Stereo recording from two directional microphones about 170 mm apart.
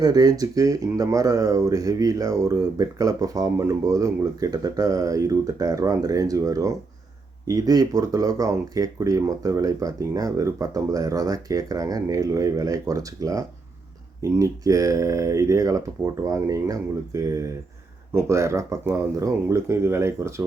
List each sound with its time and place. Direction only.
0.0 s speech: 20° right (ahead or behind)